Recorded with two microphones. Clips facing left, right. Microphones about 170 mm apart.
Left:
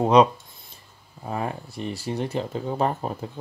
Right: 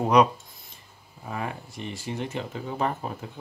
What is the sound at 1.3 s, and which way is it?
Speech, 35° left (ahead or behind).